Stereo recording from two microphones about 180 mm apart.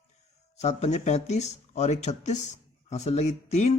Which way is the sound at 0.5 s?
40° left (ahead or behind).